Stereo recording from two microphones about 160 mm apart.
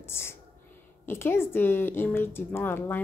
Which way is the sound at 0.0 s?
15° left (ahead or behind).